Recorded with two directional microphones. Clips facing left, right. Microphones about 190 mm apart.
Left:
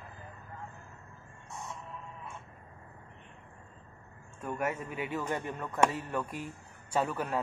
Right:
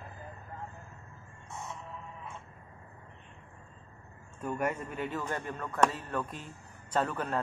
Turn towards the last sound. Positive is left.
turn(degrees=10)  # may be behind; listen again after turning